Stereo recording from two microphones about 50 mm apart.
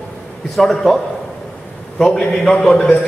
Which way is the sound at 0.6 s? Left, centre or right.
Centre.